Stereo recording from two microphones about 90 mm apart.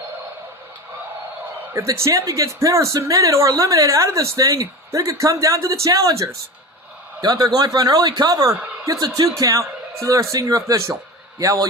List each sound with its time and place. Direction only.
1.9 s a man's voice: 35° right (ahead or behind)